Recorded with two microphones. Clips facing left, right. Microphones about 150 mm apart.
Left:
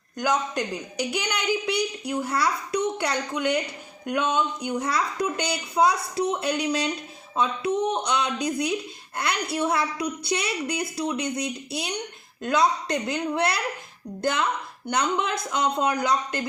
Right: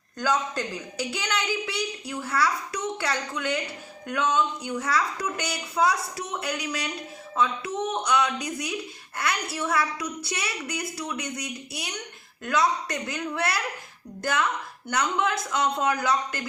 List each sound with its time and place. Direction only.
0.2 s a woman's voice: 15° left (ahead or behind)